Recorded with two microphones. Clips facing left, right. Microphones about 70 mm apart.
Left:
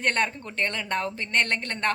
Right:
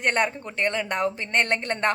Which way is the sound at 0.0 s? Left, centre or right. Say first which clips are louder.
Right 2 dB; centre.